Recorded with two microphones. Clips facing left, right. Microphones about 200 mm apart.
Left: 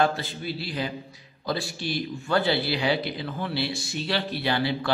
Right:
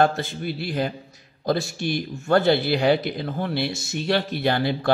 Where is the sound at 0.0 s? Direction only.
50° right (ahead or behind).